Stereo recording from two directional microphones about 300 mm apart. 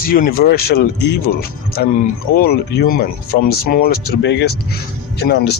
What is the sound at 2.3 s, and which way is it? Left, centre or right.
Speech, left.